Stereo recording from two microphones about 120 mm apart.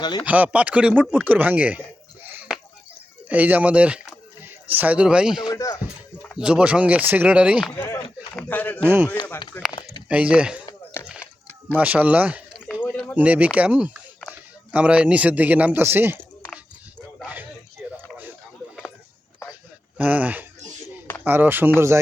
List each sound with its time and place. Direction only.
0.3 s speech: 10° right (ahead or behind)
2.5 s a sound: 5° right (ahead or behind)
3.2 s speech: 15° right (ahead or behind)
5.5 s speech: 30° left (ahead or behind)
6.3 s speech: 10° right (ahead or behind)
7.8 s speech: 25° left (ahead or behind)
8.8 s speech: 15° right (ahead or behind)
9.5 s speech: 15° left (ahead or behind)
10.1 s speech: 10° right (ahead or behind)
11.0 s a sound: 10° right (ahead or behind)
11.8 s speech: 15° right (ahead or behind)
17.2 s a sound: 15° right (ahead or behind)
20.0 s speech: 15° right (ahead or behind)